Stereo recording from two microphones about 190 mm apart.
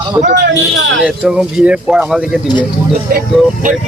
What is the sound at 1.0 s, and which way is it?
Speech, 5° right (ahead or behind).